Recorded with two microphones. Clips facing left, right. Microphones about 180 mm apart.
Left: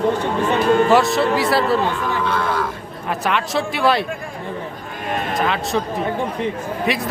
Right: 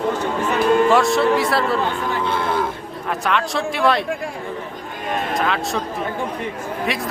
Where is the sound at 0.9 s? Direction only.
Centre (ahead or behind).